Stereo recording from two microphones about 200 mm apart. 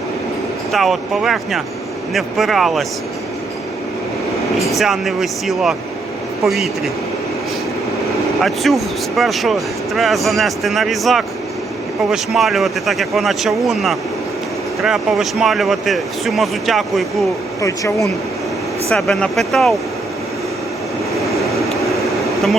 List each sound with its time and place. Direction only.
0.7 s speech: centre (ahead or behind)
4.8 s speech: centre (ahead or behind)
8.4 s speech: centre (ahead or behind)
17.6 s speech: 15° left (ahead or behind)
18.9 s speech: centre (ahead or behind)